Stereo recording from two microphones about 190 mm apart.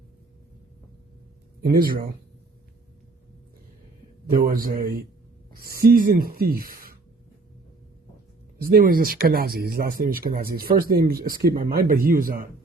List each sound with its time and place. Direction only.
1.7 s speech: 50° right (ahead or behind)
4.3 s speech: 50° right (ahead or behind)
8.6 s speech: 50° right (ahead or behind)